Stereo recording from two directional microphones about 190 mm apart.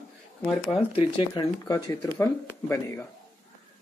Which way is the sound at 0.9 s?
30° left (ahead or behind).